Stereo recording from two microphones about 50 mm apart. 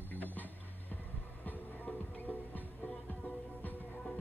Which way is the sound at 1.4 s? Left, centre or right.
Left.